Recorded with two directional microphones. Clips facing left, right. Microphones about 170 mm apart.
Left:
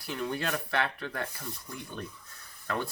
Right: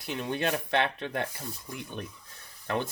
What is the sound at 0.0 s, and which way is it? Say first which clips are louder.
Speech: right 3 dB; 20° right (ahead or behind).